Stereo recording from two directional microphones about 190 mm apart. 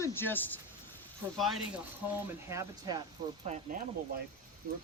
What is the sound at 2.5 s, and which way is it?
Speech, 15° right (ahead or behind).